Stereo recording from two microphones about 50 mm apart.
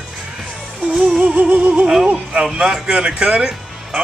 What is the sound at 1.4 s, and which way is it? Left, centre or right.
Music, right.